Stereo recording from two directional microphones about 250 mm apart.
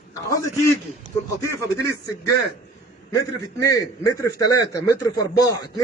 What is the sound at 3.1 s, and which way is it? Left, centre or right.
A man's voice, centre.